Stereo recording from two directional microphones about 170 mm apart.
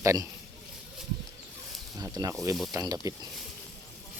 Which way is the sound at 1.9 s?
20° right (ahead or behind).